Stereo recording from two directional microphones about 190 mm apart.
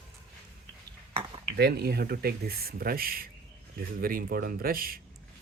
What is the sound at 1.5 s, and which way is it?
Speech, 60° right (ahead or behind).